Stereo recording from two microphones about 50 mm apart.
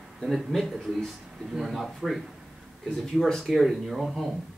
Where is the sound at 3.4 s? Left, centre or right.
Centre.